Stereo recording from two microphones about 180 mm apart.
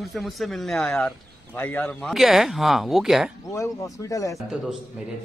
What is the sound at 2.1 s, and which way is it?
A man's voice, centre (ahead or behind).